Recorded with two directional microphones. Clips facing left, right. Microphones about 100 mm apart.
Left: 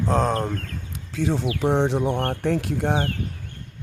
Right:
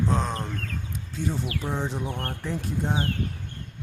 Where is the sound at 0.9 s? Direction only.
90° left; by 3.1 s 65° left (ahead or behind).